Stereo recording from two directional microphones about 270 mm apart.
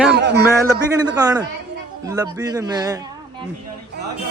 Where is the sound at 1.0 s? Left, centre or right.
Centre.